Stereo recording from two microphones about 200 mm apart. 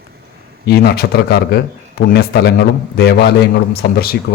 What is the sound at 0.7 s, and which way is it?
A man's voice, 50° left (ahead or behind).